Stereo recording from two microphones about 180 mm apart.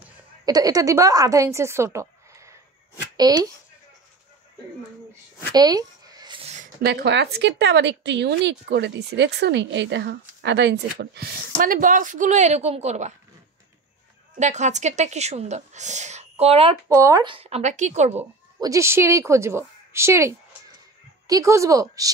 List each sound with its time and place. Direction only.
0.5 s speech: 20° right (ahead or behind)
5.5 s a sound: 20° right (ahead or behind)
6.8 s a woman's voice: 65° right (ahead or behind); by 13.1 s 40° right (ahead or behind)
14.4 s speech: 40° right (ahead or behind)
16.9 s speech: 20° right (ahead or behind); by 18.2 s 40° right (ahead or behind)
18.6 s a woman's voice: 15° right (ahead or behind)